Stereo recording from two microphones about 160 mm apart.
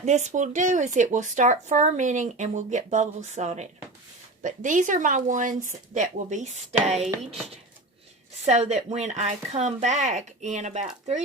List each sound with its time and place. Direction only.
0.0 s speech: 45° right (ahead or behind)
8.4 s speech: 45° right (ahead or behind)